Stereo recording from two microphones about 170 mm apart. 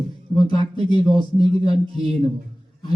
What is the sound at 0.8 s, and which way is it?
A man's voice, 30° right (ahead or behind).